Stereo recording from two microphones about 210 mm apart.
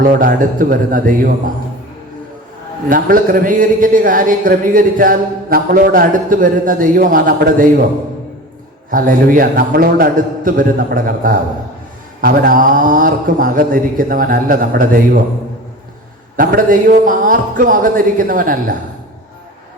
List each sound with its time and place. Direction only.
0.0 s speech: 40° right (ahead or behind)
2.9 s speech: 40° right (ahead or behind)
8.9 s speech: 40° right (ahead or behind)
16.4 s speech: 40° right (ahead or behind)